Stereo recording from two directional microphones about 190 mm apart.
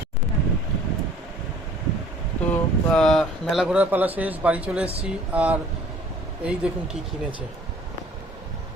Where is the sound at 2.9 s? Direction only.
5° left (ahead or behind).